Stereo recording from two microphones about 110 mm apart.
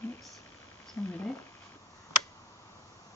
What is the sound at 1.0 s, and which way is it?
Speech, 25° left (ahead or behind).